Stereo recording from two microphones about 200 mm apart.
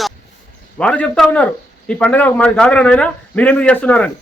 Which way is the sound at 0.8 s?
5° left (ahead or behind).